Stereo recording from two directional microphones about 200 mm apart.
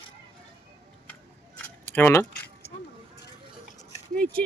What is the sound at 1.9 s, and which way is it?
Speech, 10° left (ahead or behind).